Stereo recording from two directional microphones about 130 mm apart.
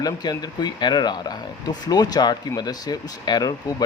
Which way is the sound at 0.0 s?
30° left (ahead or behind).